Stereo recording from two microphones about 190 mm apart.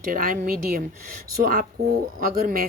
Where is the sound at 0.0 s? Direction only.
45° right (ahead or behind).